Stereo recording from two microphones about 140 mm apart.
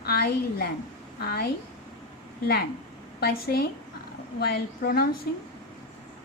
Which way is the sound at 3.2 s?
90° left.